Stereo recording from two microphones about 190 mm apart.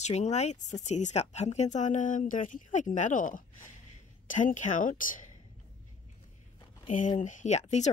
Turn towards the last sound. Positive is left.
turn(degrees=35)  # may be behind; listen again after turning